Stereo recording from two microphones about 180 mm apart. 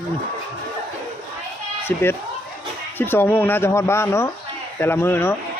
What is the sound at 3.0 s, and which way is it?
Speech, 10° left (ahead or behind).